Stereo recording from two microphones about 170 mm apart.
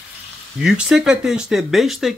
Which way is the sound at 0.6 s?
5° right (ahead or behind).